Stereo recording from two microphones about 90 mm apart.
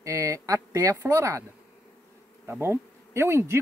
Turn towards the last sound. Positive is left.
turn(degrees=-30)  # may be behind; listen again after turning